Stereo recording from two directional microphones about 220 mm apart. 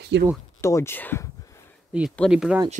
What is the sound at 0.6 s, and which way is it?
Speech, 15° left (ahead or behind).